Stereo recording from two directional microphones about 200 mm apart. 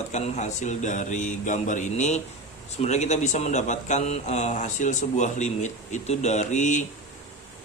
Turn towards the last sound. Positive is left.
turn(degrees=35)  # may be behind; listen again after turning